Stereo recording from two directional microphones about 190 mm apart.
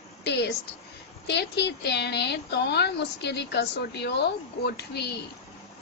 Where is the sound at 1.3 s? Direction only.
60° left (ahead or behind).